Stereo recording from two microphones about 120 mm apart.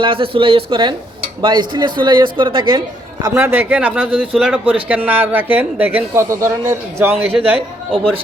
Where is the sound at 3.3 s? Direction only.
20° right (ahead or behind).